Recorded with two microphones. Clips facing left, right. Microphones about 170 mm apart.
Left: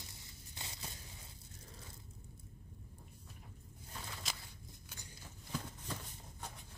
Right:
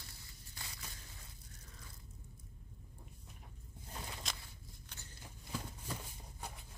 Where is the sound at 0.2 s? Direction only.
25° left (ahead or behind).